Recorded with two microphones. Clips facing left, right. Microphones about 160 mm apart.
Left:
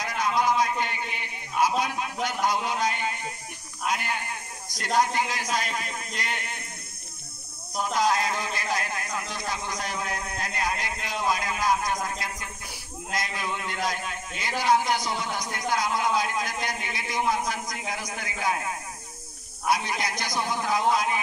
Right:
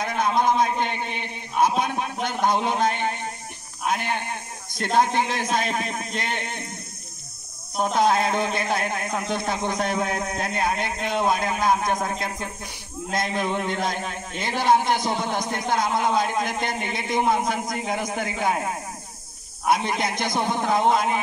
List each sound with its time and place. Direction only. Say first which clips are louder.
0.0 s a man's voice: right 4 dB; 55° right (ahead or behind)
7.8 s a man's voice: right 4 dB; 55° right (ahead or behind)